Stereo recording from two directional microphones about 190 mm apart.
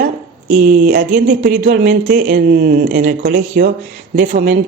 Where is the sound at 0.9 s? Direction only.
45° right (ahead or behind).